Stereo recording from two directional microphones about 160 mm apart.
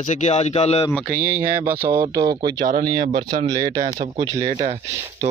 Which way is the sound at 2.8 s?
25° right (ahead or behind).